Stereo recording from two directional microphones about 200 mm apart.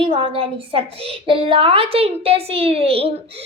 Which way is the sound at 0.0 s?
25° right (ahead or behind).